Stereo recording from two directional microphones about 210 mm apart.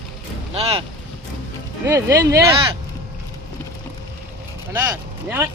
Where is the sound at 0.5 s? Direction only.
30° right (ahead or behind).